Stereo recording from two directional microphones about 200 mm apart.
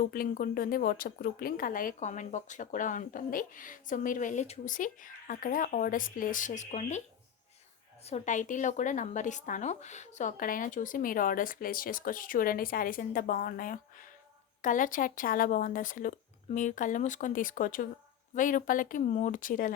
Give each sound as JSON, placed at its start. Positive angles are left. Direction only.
{"t": 0.0, "sound": "speech", "side_deg": 45}
{"t": 8.0, "sound": "speech", "side_deg": 35}